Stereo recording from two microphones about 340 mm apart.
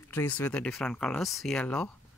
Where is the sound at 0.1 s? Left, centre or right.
Centre.